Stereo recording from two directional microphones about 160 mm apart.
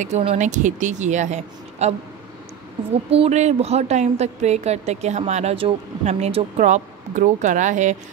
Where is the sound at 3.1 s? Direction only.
40° right (ahead or behind).